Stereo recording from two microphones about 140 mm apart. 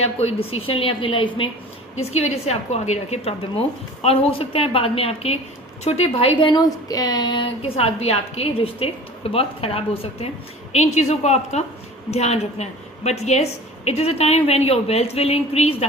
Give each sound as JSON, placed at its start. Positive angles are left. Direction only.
{"t": 0.0, "sound": "a woman's voice", "side_deg": 45}
{"t": 2.0, "sound": "a woman's voice", "side_deg": 50}